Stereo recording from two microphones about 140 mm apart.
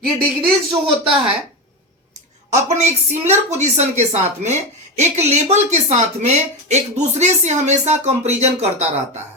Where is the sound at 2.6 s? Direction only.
55° right (ahead or behind).